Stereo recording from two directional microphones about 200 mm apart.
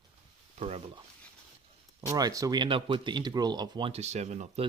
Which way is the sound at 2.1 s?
20° right (ahead or behind).